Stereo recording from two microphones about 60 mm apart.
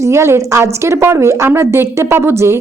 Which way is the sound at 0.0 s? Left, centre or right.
Right.